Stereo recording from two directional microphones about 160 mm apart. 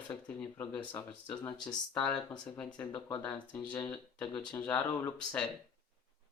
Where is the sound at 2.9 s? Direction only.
25° left (ahead or behind).